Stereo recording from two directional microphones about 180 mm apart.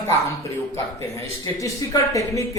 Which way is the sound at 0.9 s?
20° left (ahead or behind).